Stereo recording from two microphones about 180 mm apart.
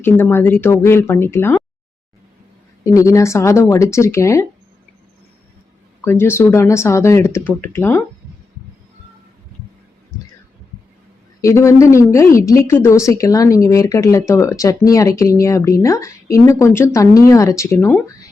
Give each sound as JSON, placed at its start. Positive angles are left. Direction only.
{"t": 0.0, "sound": "speech", "side_deg": 10}
{"t": 2.8, "sound": "speech", "side_deg": 15}
{"t": 6.1, "sound": "speech", "side_deg": 15}
{"t": 11.3, "sound": "speech", "side_deg": 15}